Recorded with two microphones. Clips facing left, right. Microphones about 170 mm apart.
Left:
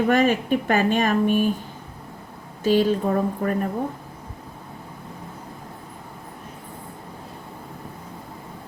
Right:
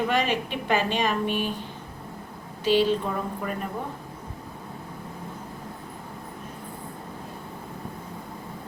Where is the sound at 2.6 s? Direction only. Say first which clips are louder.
Left 3 dB; 45° left (ahead or behind).